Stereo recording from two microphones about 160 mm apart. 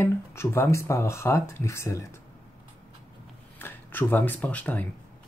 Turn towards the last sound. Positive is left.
turn(degrees=10)  # may be behind; listen again after turning